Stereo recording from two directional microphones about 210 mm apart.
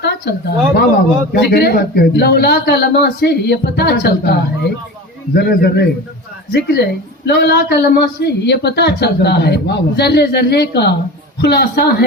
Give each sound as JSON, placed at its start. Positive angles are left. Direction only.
{"t": 0.0, "sound": "a woman's voice", "side_deg": 50}